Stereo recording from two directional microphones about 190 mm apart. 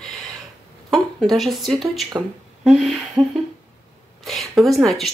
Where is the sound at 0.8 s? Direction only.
Centre (ahead or behind).